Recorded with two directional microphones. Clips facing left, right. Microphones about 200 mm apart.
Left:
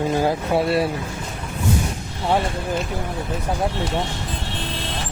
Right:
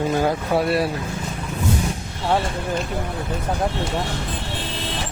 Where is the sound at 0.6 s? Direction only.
25° left (ahead or behind).